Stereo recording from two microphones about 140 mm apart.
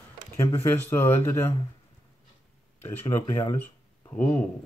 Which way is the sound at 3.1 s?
20° left (ahead or behind).